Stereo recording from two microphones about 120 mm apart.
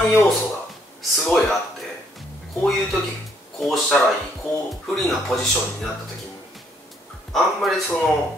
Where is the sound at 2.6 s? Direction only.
5° left (ahead or behind).